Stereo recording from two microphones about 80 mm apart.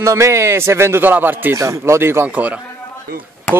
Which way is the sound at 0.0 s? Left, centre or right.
Right.